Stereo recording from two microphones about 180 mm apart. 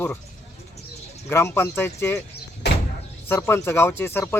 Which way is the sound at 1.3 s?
15° left (ahead or behind).